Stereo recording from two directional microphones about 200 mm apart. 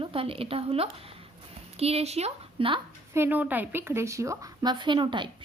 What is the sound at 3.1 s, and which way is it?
A woman's voice, 10° right (ahead or behind).